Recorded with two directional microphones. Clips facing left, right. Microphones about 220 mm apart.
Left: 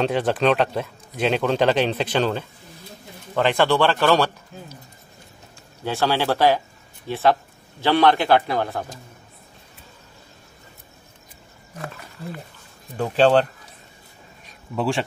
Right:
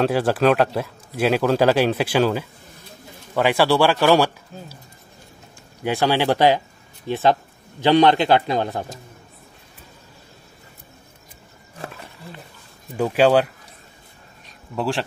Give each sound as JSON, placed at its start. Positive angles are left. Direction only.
{"t": 0.0, "sound": "speech", "side_deg": -5}
{"t": 5.9, "sound": "speech", "side_deg": -15}
{"t": 12.9, "sound": "speech", "side_deg": -10}
{"t": 14.8, "sound": "speech", "side_deg": 0}